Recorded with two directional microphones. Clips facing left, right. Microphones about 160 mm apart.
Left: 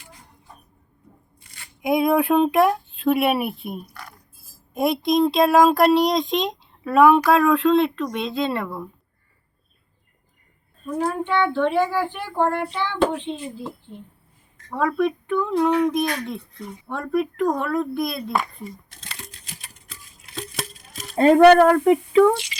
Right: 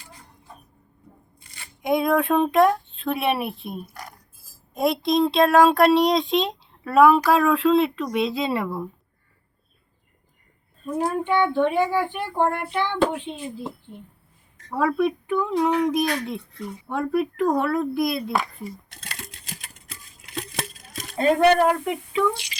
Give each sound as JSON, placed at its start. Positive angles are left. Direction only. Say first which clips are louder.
{"t": 1.8, "sound": "speech", "louder": "left 2 dB", "side_deg": 5}
{"t": 11.0, "sound": "a child's voice", "louder": "even", "side_deg": -15}
{"t": 14.8, "sound": "a child's voice", "louder": "even", "side_deg": -5}
{"t": 21.3, "sound": "speech", "louder": "left 7 dB", "side_deg": 60}